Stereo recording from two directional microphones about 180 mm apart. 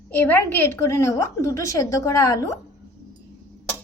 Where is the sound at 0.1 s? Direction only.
10° left (ahead or behind).